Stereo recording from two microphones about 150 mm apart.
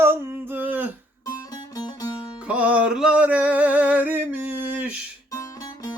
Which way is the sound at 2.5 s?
10° right (ahead or behind).